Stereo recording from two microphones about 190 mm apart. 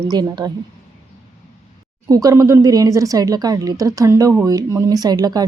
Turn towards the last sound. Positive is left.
turn(degrees=-20)  # may be behind; listen again after turning